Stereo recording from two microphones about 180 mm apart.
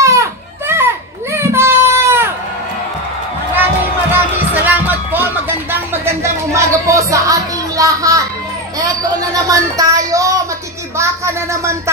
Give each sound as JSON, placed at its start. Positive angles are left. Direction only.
{"t": 0.0, "sound": "children playing", "side_deg": -15}
{"t": 4.1, "sound": "music", "side_deg": -10}
{"t": 9.3, "sound": "speech", "side_deg": -20}